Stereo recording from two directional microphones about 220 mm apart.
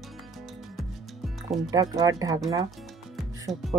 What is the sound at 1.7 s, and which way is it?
Speech, 15° right (ahead or behind).